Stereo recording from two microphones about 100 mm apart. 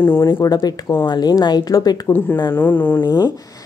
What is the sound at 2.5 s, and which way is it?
Speech, 20° left (ahead or behind).